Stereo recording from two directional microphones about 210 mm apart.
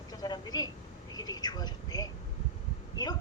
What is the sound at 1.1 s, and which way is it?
Speech, 20° left (ahead or behind).